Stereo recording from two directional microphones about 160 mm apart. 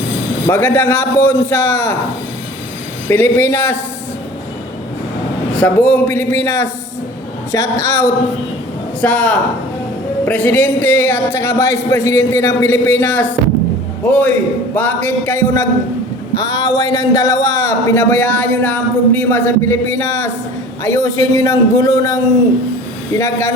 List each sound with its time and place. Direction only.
0.5 s a man's voice: 10° left (ahead or behind)
3.1 s a man's voice: 15° left (ahead or behind)
5.5 s a man's voice: 10° left (ahead or behind)